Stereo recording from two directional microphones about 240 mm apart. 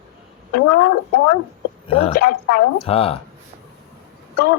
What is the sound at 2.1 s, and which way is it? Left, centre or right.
Speech, left.